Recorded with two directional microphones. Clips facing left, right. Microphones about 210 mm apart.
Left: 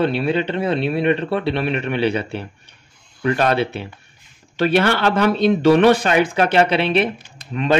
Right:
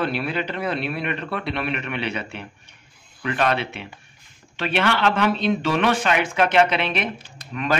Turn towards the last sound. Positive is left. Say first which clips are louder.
# left 6 dB
turn(degrees=25)  # may be behind; listen again after turning